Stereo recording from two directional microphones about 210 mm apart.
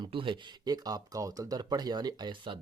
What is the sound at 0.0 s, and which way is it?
Speech, 25° right (ahead or behind).